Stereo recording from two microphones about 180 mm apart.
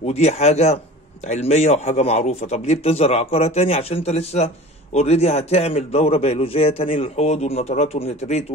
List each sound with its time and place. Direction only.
0.0 s a man's voice: 35° left (ahead or behind)